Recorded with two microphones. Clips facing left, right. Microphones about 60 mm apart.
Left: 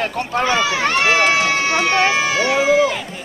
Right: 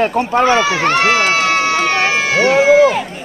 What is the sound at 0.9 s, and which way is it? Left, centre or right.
Run, right.